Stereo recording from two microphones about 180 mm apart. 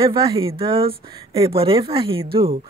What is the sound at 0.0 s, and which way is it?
Speech, 25° right (ahead or behind).